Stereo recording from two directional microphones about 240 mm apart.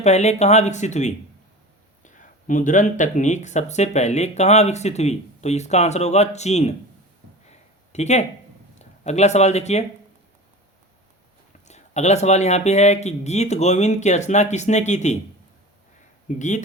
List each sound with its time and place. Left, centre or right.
0.0 s speech: left
7.4 s a sound: left
8.8 s speech: left
11.7 s speech: left
16.4 s speech: left